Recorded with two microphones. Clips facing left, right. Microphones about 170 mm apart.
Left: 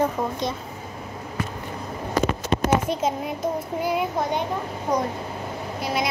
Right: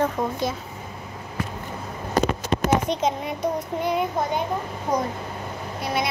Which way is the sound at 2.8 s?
5° left (ahead or behind).